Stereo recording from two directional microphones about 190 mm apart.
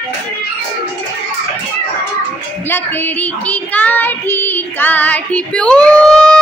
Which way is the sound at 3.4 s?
5° left (ahead or behind).